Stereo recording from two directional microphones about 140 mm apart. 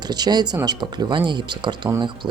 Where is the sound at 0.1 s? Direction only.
30° right (ahead or behind).